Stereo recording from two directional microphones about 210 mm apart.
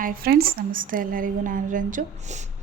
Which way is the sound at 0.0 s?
45° right (ahead or behind).